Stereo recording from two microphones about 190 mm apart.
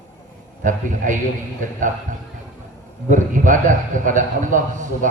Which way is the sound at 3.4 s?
40° right (ahead or behind).